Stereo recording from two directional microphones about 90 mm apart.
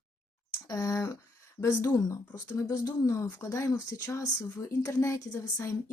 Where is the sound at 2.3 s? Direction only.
40° left (ahead or behind).